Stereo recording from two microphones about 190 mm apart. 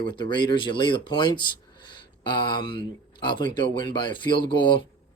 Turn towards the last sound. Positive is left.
turn(degrees=25)  # may be behind; listen again after turning